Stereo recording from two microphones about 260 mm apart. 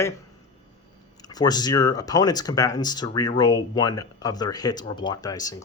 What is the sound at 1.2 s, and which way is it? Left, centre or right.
Speech, centre.